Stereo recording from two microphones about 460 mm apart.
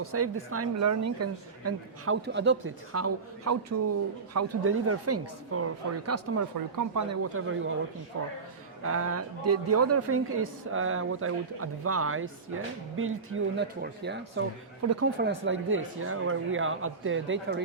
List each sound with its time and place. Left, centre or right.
0.0 s a woman's voice: right
8.8 s speech: right